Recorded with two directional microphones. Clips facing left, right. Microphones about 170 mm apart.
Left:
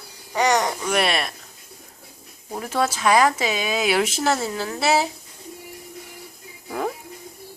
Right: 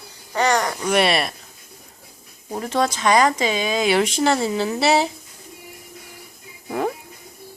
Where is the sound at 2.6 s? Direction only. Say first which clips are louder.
Right 2 dB; 5° left (ahead or behind).